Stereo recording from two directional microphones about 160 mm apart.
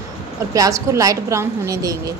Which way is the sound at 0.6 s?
20° right (ahead or behind).